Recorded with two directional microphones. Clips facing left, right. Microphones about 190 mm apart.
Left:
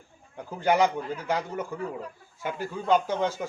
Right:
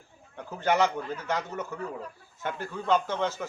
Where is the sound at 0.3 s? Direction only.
10° left (ahead or behind).